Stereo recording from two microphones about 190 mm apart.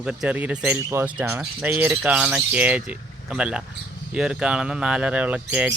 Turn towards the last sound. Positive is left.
turn(degrees=-5)  # may be behind; listen again after turning